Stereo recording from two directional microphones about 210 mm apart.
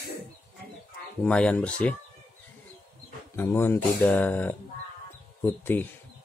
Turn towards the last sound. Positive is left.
turn(degrees=10)  # may be behind; listen again after turning